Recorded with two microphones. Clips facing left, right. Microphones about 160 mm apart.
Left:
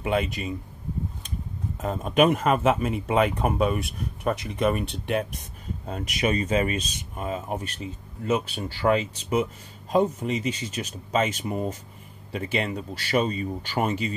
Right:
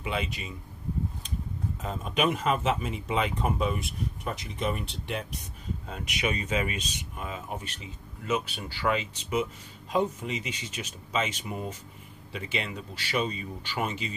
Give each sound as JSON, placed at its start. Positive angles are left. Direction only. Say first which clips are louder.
{"t": 0.0, "sound": "speech", "louder": "left 7 dB", "side_deg": 50}
{"t": 1.8, "sound": "speech", "louder": "left 8 dB", "side_deg": 50}
{"t": 5.9, "sound": "speech", "louder": "left 6 dB", "side_deg": 40}